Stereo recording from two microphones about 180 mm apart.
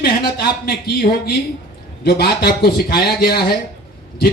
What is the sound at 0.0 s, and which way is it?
A man's voice, 60° left (ahead or behind).